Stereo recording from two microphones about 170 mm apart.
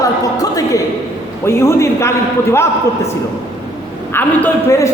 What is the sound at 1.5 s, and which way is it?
A man's voice, 15° left (ahead or behind).